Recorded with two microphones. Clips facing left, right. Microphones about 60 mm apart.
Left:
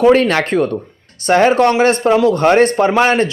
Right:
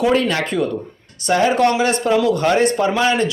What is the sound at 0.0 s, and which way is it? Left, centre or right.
A man's voice, left.